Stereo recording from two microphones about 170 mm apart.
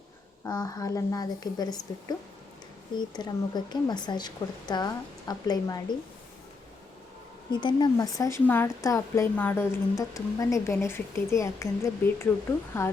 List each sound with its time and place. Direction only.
0.4 s speech: 20° left (ahead or behind)
2.9 s speech: 25° left (ahead or behind)
7.6 s speech: 25° left (ahead or behind)